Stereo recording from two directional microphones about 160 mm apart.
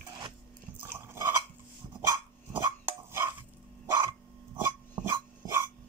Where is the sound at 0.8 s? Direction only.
15° right (ahead or behind).